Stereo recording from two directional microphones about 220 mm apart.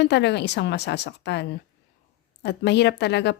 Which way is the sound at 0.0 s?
50° left (ahead or behind).